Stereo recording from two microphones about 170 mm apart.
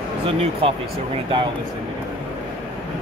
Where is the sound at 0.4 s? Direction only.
35° right (ahead or behind).